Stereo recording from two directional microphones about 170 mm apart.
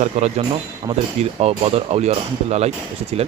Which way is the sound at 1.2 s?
40° right (ahead or behind).